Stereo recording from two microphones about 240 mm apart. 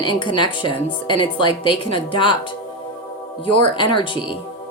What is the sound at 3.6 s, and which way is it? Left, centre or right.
Speech, centre.